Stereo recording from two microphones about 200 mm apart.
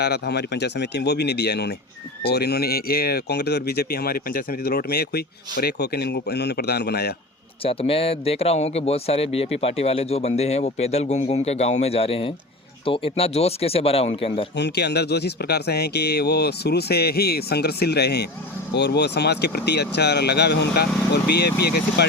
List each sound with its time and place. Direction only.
0.0 s speech: 55° left (ahead or behind)
7.6 s speech: 30° left (ahead or behind)
14.5 s speech: 60° left (ahead or behind)